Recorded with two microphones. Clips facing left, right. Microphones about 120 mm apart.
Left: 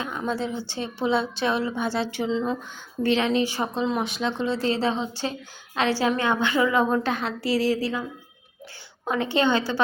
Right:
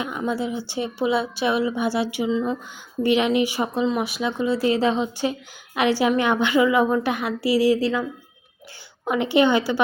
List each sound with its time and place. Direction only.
0.0 s a woman's voice: 10° right (ahead or behind)
9.0 s a woman's voice: 15° right (ahead or behind)